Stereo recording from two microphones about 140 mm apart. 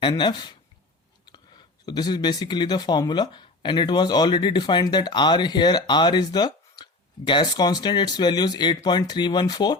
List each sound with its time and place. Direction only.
0.0 s speech: 35° left (ahead or behind)
1.9 s speech: 30° left (ahead or behind)